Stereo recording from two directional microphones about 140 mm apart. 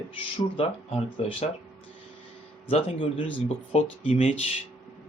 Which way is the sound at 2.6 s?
45° left (ahead or behind).